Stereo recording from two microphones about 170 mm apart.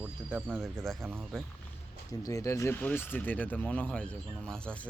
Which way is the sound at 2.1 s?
20° left (ahead or behind).